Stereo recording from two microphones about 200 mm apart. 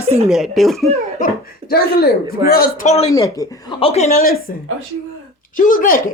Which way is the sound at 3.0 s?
15° left (ahead or behind).